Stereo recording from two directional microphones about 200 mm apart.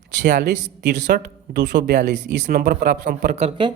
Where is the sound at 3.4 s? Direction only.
25° right (ahead or behind).